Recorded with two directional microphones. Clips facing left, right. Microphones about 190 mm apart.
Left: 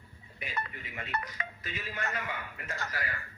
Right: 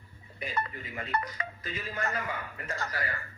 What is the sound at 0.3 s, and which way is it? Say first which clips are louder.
Speech: right 5 dB; 40° right (ahead or behind).